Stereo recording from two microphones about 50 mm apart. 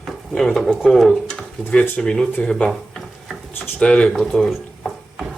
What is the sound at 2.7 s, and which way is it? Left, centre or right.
Drawer open or close, centre.